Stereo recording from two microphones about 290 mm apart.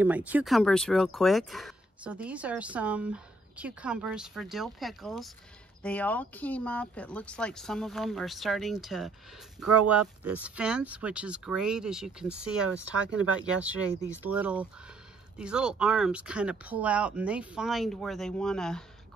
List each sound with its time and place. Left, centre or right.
0.0 s speech: centre